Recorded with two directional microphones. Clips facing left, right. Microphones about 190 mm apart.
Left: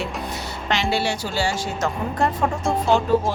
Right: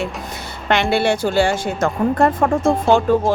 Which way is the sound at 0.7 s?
55° right (ahead or behind).